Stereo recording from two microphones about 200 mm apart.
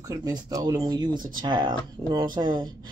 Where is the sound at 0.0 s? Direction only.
20° right (ahead or behind).